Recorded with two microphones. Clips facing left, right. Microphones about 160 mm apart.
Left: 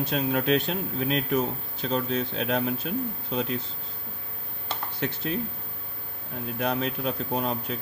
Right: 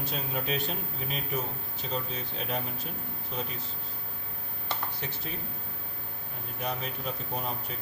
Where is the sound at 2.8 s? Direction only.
90° left.